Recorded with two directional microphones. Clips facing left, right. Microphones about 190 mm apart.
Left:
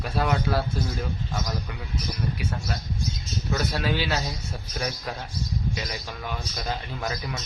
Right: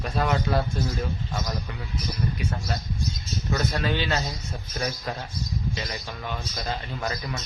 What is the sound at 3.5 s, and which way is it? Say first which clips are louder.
A man's voice: even; 5° left (ahead or behind).